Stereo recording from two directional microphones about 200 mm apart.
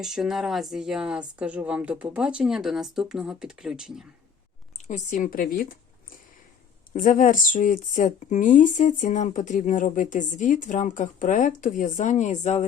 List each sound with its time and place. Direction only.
0.0 s speech: centre (ahead or behind)
4.9 s speech: 35° left (ahead or behind)
6.9 s speech: 40° left (ahead or behind)